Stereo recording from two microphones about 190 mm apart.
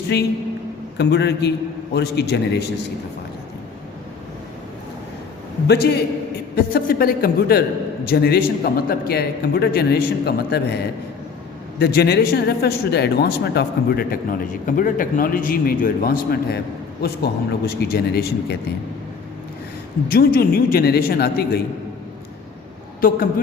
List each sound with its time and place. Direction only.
0.1 s a man's voice: 60° left (ahead or behind)
5.6 s a man's voice: 60° left (ahead or behind)
17.7 s a man's voice: 55° left (ahead or behind)
20.1 s a man's voice: 50° left (ahead or behind)
23.0 s speech: 50° left (ahead or behind)